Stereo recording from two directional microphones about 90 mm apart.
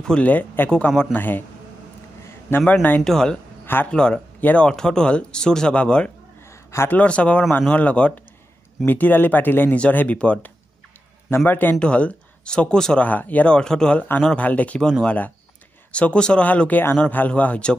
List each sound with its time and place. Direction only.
0.0 s speech: 15° left (ahead or behind)
1.1 s speech: 20° left (ahead or behind)
2.6 s speech: 20° left (ahead or behind)
3.0 s speech: 5° left (ahead or behind)
3.6 s speech: 25° left (ahead or behind)
3.9 s speech: 10° left (ahead or behind)
6.7 s speech: 30° left (ahead or behind)
7.0 s speech: 15° left (ahead or behind)
11.2 s speech: 25° left (ahead or behind)